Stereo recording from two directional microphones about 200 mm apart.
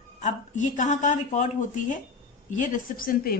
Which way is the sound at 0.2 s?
35° left (ahead or behind).